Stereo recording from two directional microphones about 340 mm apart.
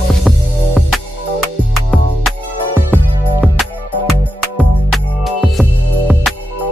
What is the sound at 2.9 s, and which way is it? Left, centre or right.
Music, centre.